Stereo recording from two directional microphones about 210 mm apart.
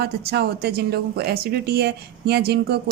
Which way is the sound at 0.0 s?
50° right (ahead or behind).